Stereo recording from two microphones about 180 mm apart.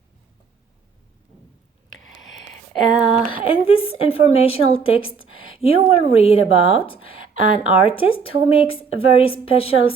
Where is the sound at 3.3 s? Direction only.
30° left (ahead or behind).